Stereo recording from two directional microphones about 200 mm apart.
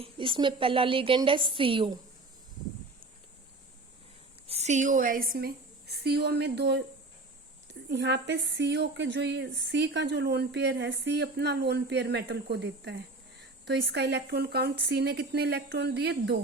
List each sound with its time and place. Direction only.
0.0 s a woman's voice: 25° right (ahead or behind)
4.4 s a woman's voice: 35° right (ahead or behind); by 16.4 s 55° right (ahead or behind)